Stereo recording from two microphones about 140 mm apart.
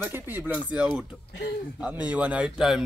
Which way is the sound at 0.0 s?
15° right (ahead or behind).